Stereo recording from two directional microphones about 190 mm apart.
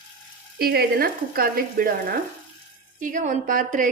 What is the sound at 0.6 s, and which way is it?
A woman's voice, 55° right (ahead or behind).